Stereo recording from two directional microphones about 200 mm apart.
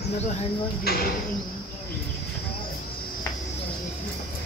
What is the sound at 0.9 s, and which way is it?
Speech, 50° left (ahead or behind).